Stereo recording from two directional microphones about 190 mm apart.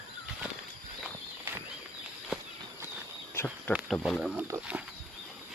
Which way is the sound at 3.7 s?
Centre (ahead or behind).